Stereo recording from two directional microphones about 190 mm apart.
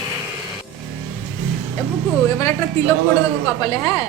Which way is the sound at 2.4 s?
15° left (ahead or behind).